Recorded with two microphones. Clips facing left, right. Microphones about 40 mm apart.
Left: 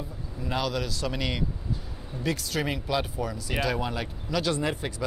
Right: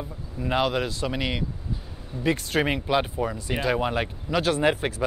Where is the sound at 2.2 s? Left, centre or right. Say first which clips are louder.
Right 5 dB; right.